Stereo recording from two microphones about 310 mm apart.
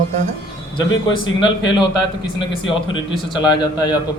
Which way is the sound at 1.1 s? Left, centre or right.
Centre.